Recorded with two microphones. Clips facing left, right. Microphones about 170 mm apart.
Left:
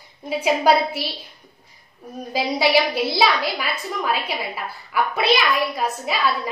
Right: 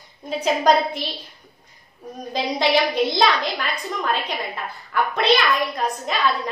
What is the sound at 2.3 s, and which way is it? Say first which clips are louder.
A woman's voice: left 1 dB; 5° left (ahead or behind).